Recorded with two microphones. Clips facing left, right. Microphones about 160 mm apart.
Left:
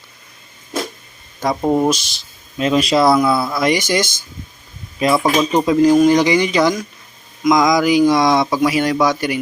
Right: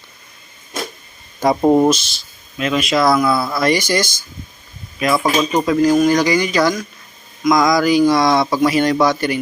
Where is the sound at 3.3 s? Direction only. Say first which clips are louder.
Even; centre (ahead or behind).